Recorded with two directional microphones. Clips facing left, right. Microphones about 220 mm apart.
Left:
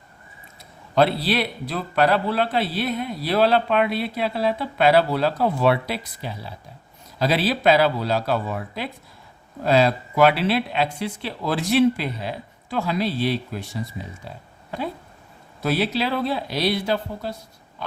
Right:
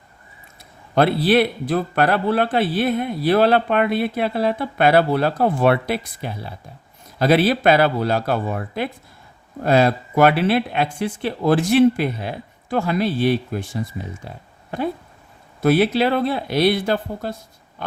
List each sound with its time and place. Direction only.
0.9 s speech: 55° right (ahead or behind)
14.3 s a sound: 55° right (ahead or behind)
15.6 s speech: 55° right (ahead or behind)